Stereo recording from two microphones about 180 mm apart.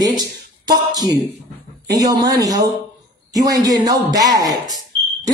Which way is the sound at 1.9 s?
20° right (ahead or behind).